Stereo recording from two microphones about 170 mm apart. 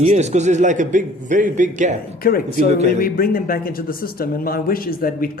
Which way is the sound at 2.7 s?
40° right (ahead or behind).